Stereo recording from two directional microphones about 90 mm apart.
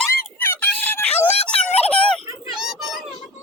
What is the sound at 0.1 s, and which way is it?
Music, 30° left (ahead or behind).